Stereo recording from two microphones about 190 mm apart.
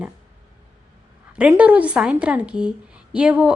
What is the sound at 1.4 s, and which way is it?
A woman's voice, 5° right (ahead or behind).